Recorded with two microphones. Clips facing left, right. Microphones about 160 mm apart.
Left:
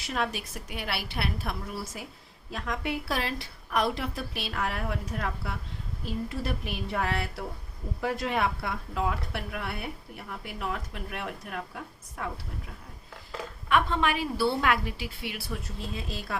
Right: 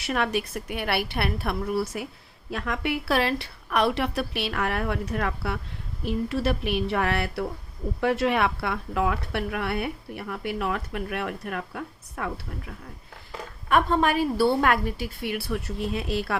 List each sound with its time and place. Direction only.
0.0 s a woman's voice: 65° right (ahead or behind)
6.1 s speech: 80° right; by 12.3 s 60° right (ahead or behind)
13.7 s a woman's voice: 45° right (ahead or behind); by 16.4 s 70° right (ahead or behind)